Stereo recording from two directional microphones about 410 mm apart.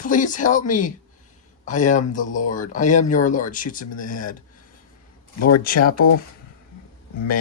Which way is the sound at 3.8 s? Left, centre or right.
Left.